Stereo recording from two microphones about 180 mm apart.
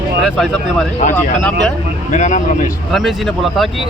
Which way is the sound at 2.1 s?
40° left (ahead or behind).